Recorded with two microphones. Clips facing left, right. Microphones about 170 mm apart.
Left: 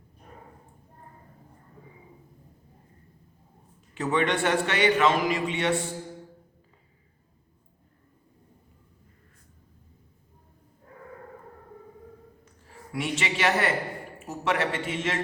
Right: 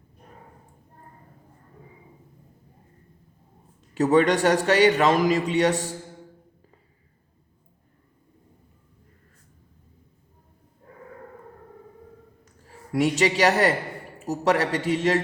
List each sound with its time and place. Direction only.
3.9 s a man's voice: 40° right (ahead or behind)
12.9 s a man's voice: 40° right (ahead or behind)